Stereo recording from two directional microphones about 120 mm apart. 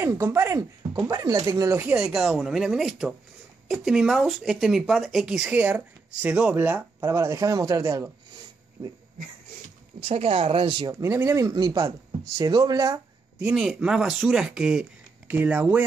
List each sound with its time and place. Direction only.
0.0 s speech: 20° right (ahead or behind)
2.0 s speech: 5° right (ahead or behind); by 8.1 s 25° right (ahead or behind)
9.9 s speech: 55° right (ahead or behind)
10.9 s speech: 25° right (ahead or behind)
13.4 s speech: 10° right (ahead or behind)